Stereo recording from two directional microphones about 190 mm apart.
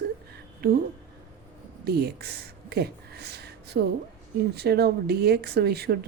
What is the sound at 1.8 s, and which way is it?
Speech, 55° right (ahead or behind).